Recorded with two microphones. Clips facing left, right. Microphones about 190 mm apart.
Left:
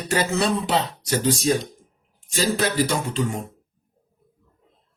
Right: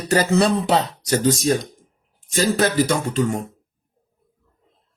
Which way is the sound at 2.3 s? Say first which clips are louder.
Right 4 dB; 45° right (ahead or behind).